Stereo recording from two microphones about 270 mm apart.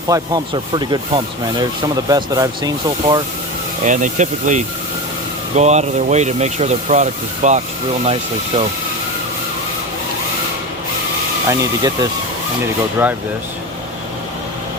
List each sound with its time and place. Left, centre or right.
0.1 s speech: centre
3.8 s speech: right
11.4 s speech: centre